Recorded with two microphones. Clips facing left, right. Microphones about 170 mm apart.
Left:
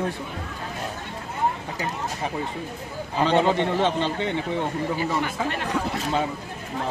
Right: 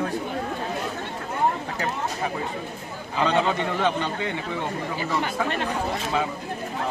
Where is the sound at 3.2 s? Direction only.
25° left (ahead or behind).